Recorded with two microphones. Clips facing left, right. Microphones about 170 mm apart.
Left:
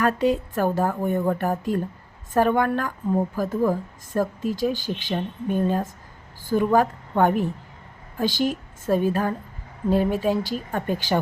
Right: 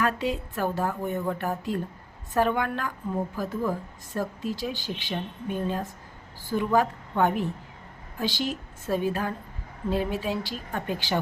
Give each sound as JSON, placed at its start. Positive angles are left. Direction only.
{"t": 0.0, "sound": "speech", "side_deg": 45}